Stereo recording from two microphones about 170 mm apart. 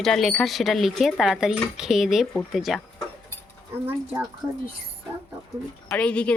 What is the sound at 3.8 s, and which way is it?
Speech, 10° right (ahead or behind).